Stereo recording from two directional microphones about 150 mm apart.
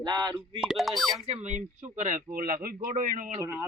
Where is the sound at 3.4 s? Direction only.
15° right (ahead or behind).